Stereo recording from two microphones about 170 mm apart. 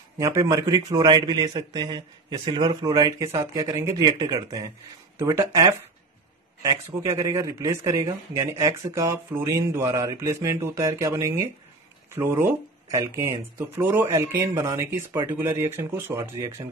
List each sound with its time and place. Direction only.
0.2 s a man's voice: 20° right (ahead or behind)
7.0 s a man's voice: 20° right (ahead or behind)